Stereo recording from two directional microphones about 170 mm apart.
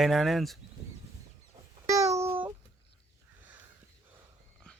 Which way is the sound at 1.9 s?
20° right (ahead or behind).